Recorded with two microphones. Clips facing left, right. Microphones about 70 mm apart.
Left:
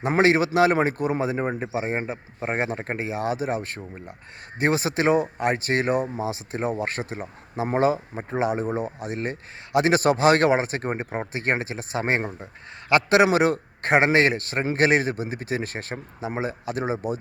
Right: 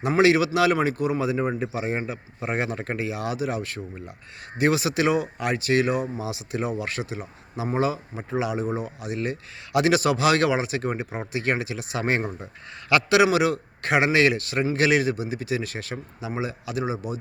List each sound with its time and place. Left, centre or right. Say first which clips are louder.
0.1 s a man's voice: even; left